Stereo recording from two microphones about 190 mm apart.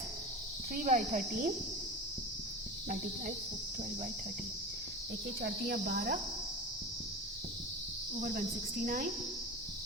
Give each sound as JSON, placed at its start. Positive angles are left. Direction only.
{"t": 0.7, "sound": "cricket", "side_deg": -45}
{"t": 5.4, "sound": "speech", "side_deg": -60}
{"t": 5.8, "sound": "cricket", "side_deg": -55}
{"t": 8.2, "sound": "cricket", "side_deg": -45}